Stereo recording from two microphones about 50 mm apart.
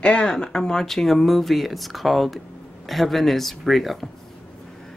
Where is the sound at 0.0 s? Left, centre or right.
Left; by 4.1 s centre.